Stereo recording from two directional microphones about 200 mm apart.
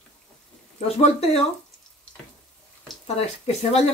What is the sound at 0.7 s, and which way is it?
Speech, 30° left (ahead or behind).